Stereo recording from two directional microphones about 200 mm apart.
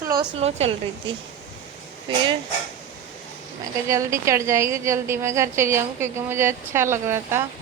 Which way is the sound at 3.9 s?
15° right (ahead or behind).